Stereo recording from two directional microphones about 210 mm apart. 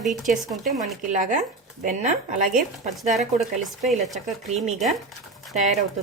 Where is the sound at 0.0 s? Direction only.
Centre (ahead or behind).